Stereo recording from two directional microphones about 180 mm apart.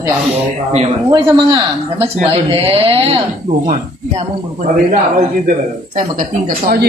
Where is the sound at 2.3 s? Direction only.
30° right (ahead or behind).